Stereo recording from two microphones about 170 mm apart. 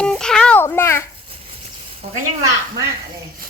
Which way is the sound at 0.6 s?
15° left (ahead or behind).